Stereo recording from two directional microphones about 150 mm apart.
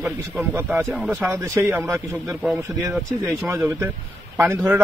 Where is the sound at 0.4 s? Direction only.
15° right (ahead or behind).